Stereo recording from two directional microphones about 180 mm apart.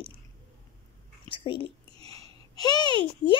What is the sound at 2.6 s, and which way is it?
Speech, 25° left (ahead or behind).